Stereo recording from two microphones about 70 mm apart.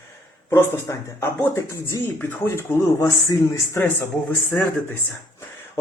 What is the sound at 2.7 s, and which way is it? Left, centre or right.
Speech, left.